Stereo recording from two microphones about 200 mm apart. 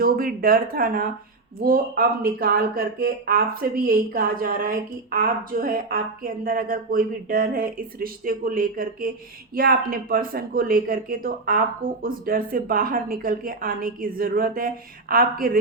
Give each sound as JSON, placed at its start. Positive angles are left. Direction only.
{"t": 0.0, "sound": "speech", "side_deg": -45}